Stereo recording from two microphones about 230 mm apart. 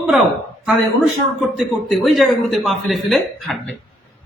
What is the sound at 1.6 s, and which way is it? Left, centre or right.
Speech, centre.